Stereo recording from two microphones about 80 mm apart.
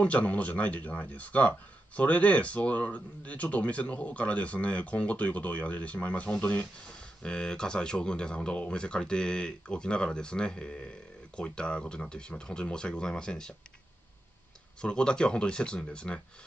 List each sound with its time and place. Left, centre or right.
0.0 s speech: centre
14.8 s speech: centre